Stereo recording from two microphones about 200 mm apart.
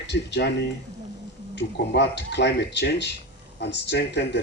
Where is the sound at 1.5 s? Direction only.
60° left (ahead or behind).